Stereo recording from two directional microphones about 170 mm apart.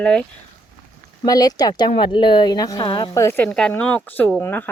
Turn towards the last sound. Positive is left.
turn(degrees=10)  # may be behind; listen again after turning